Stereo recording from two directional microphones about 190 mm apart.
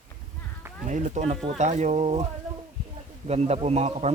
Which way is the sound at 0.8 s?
40° right (ahead or behind).